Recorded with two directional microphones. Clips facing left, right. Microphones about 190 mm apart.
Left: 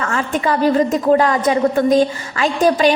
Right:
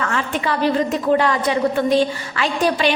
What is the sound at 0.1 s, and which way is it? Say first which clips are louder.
A woman's voice: left 3 dB; 40° left (ahead or behind).